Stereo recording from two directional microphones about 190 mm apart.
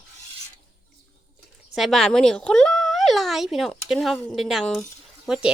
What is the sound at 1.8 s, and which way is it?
Speech, centre (ahead or behind).